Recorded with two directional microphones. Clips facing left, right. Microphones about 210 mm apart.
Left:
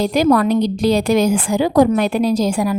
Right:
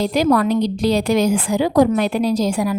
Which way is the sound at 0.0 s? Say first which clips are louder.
Left 2 dB; 50° left (ahead or behind).